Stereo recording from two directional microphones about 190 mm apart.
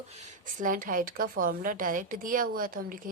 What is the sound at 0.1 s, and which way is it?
A woman's voice, 40° right (ahead or behind).